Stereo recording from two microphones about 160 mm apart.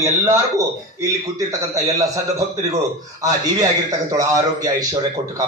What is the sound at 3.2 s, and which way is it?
A man's voice, 25° right (ahead or behind).